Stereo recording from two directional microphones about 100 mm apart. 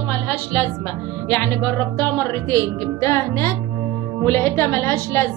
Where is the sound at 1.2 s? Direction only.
20° left (ahead or behind).